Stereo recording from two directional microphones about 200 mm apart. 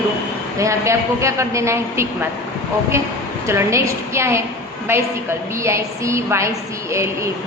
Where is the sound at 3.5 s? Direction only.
15° right (ahead or behind).